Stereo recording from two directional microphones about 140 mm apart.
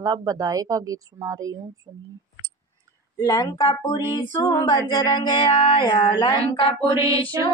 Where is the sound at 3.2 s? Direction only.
25° left (ahead or behind).